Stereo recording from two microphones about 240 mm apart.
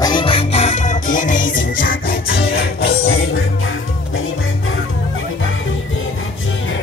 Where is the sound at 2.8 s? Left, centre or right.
Left.